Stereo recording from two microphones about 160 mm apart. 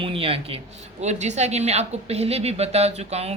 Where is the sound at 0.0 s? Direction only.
35° right (ahead or behind).